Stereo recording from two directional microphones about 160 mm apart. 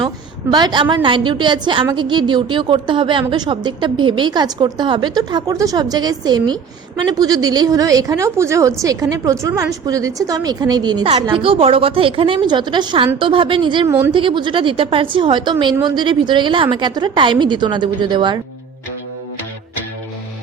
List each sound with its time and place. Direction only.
0.5 s a woman's voice: 25° right (ahead or behind)
13.8 s a woman's voice: 15° right (ahead or behind)
14.1 s a woman's voice: 30° right (ahead or behind)